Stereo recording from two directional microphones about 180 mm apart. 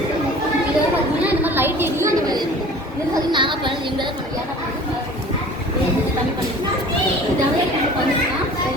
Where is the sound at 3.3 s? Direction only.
25° right (ahead or behind).